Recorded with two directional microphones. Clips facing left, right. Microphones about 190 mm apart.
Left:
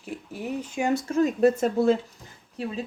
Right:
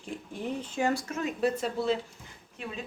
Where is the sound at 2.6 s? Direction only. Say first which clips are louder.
Left 8 dB; 35° left (ahead or behind).